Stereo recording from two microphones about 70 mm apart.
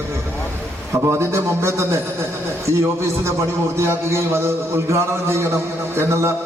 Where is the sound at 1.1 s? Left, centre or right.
Right.